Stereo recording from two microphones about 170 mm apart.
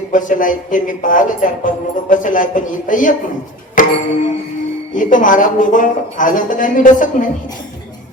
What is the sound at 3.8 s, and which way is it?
Music, 50° left (ahead or behind).